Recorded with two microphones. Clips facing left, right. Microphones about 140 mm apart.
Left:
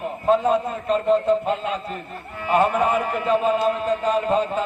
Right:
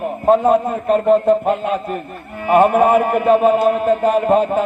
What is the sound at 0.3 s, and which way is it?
A man's voice, 55° right (ahead or behind).